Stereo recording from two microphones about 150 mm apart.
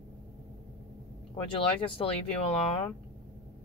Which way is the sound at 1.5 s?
35° left (ahead or behind).